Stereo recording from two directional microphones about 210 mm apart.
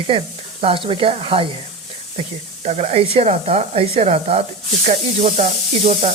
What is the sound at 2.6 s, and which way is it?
Speech, 30° right (ahead or behind).